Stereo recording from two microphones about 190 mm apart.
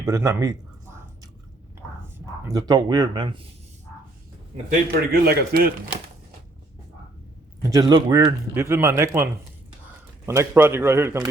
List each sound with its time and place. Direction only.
0.0 s speech: 15° right (ahead or behind)
2.1 s speech: 15° right (ahead or behind)
4.9 s a man's voice: 55° right (ahead or behind)
7.6 s speech: 20° right (ahead or behind)